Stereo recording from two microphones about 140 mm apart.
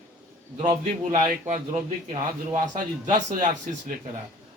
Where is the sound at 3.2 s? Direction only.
60° right (ahead or behind).